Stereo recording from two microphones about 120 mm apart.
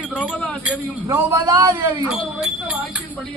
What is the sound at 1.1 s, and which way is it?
Speech, 25° right (ahead or behind).